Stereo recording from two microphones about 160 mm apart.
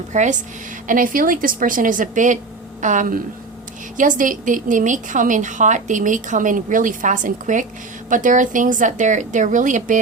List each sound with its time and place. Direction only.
0.1 s a woman's voice: 50° right (ahead or behind)
0.9 s a woman's voice: 60° right (ahead or behind)